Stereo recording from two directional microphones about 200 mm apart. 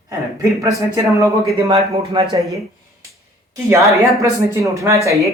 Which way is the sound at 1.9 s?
30° right (ahead or behind).